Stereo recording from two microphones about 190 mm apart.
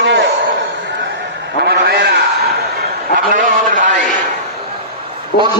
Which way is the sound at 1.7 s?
60° right (ahead or behind).